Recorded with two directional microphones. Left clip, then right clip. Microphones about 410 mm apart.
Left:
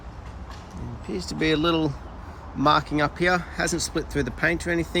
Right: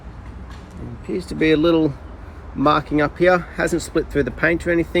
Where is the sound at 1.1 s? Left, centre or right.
Centre.